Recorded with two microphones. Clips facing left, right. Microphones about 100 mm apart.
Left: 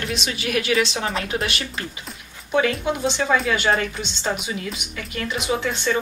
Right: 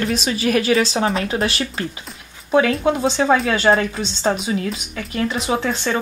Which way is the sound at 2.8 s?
35° right (ahead or behind).